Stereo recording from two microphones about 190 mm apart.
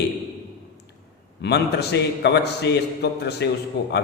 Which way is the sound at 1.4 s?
60° left (ahead or behind).